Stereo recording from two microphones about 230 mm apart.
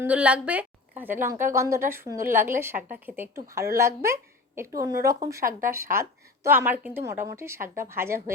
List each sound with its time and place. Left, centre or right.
0.0 s a woman's voice: centre